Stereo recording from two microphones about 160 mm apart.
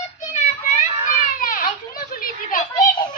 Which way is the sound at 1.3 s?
60° left (ahead or behind).